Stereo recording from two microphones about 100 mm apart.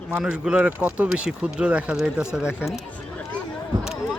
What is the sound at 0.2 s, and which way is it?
Speech, 10° right (ahead or behind).